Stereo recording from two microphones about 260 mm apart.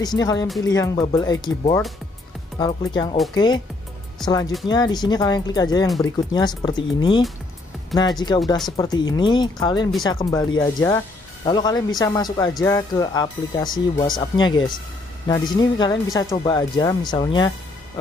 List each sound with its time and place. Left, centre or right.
0.0 s speech: centre
4.2 s speech: centre
4.6 s speech: centre